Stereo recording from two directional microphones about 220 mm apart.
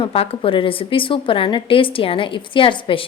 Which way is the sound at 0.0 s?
25° left (ahead or behind).